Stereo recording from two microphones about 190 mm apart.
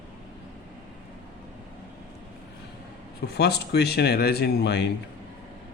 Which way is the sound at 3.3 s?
60° left (ahead or behind).